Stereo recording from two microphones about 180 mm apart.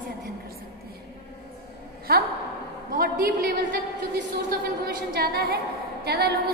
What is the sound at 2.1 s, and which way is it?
A woman's voice, 60° right (ahead or behind).